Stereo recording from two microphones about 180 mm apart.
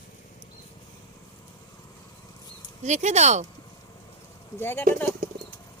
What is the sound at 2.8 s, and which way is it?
Speech, 40° right (ahead or behind).